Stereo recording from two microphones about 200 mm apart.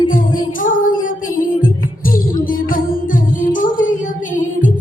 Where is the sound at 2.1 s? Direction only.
45° left (ahead or behind).